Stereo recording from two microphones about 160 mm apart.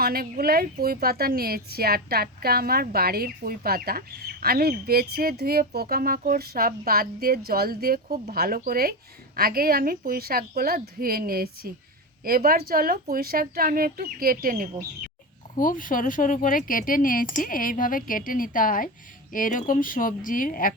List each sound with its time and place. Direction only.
0.0 s a woman's voice: 70° right (ahead or behind)
15.5 s speech: 60° left (ahead or behind)